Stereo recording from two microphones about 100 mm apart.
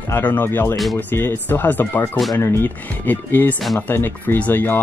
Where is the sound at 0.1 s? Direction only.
20° left (ahead or behind).